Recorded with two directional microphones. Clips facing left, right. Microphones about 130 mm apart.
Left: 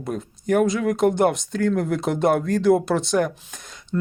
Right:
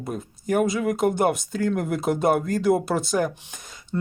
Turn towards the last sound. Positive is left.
turn(degrees=-15)  # may be behind; listen again after turning